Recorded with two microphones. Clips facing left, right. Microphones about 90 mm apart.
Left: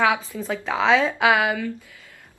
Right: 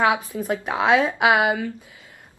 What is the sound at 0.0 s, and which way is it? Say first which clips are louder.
A woman's voice: right 1 dB; 20° right (ahead or behind).